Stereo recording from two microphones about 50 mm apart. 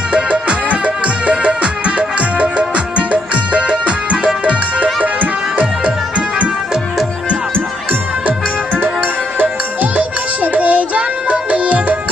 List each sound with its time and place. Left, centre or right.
0.1 s music: right
9.4 s music: right